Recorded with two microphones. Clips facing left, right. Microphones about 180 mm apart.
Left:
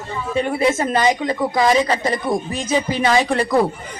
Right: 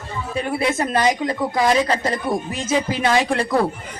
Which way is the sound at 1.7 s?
10° left (ahead or behind).